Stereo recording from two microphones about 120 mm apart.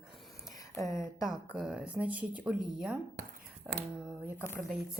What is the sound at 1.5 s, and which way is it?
A woman's voice, 5° right (ahead or behind).